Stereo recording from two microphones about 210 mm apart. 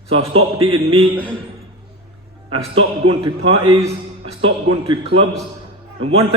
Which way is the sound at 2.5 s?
25° right (ahead or behind).